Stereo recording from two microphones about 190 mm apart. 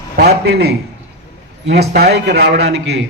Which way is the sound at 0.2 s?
55° right (ahead or behind).